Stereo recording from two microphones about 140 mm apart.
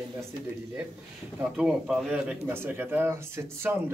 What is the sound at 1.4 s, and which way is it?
Speech, 5° right (ahead or behind).